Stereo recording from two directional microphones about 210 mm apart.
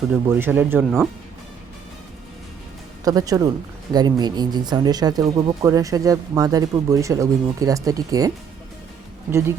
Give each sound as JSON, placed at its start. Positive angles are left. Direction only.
{"t": 0.1, "sound": "speech", "side_deg": -10}
{"t": 3.0, "sound": "speech", "side_deg": -15}